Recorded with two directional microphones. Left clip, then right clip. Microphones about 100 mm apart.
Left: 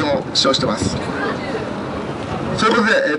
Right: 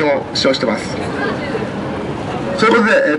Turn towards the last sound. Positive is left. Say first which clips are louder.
# right 3 dB
turn(degrees=20)  # may be behind; listen again after turning